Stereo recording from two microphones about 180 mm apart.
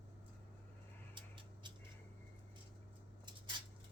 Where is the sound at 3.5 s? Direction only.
25° right (ahead or behind).